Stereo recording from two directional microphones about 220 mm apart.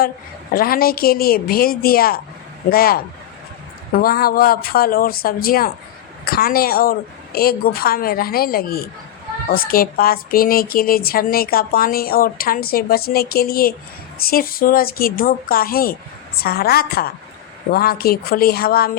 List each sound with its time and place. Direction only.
0.5 s speech: 40° left (ahead or behind)